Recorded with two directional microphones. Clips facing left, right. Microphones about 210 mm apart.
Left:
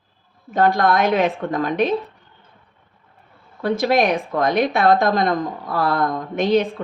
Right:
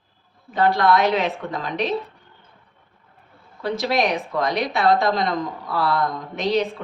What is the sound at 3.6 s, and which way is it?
Speech, 55° left (ahead or behind).